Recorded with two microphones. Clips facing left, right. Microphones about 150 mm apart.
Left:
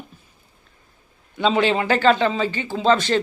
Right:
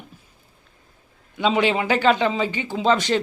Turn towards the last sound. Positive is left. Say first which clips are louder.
# left 1 dB
turn(degrees=-15)  # may be behind; listen again after turning